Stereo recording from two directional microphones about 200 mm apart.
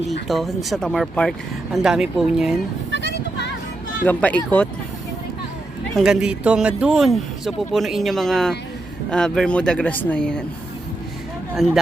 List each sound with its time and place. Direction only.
0.3 s speech: centre (ahead or behind)
2.9 s a sound: 60° left (ahead or behind)
4.0 s speech: 10° left (ahead or behind)
6.0 s speech: 5° right (ahead or behind)
11.5 s speech: centre (ahead or behind)